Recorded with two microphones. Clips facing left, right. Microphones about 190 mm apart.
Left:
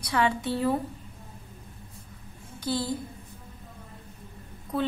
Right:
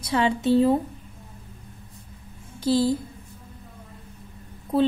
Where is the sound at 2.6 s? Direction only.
25° right (ahead or behind).